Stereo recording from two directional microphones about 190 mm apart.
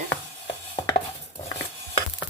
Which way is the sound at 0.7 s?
20° left (ahead or behind).